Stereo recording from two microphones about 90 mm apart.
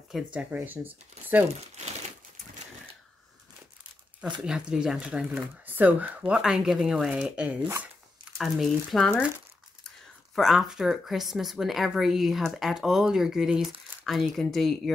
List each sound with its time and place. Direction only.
0.3 s speech: 15° right (ahead or behind)
4.4 s speech: 10° right (ahead or behind)
6.3 s speech: 5° right (ahead or behind)
8.4 s speech: centre (ahead or behind)
10.3 s speech: centre (ahead or behind)